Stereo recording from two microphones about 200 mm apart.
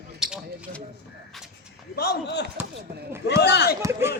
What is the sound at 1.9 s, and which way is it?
Speech, 50° left (ahead or behind).